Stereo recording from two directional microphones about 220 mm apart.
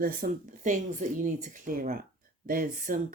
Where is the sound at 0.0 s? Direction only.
40° right (ahead or behind).